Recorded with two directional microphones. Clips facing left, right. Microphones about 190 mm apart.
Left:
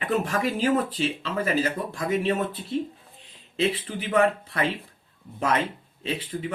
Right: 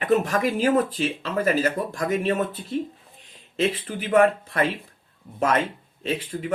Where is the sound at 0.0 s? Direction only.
45° right (ahead or behind).